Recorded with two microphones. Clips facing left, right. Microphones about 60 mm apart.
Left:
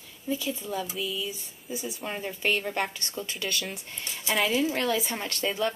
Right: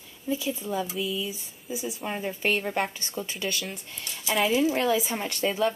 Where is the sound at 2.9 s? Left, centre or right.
Right.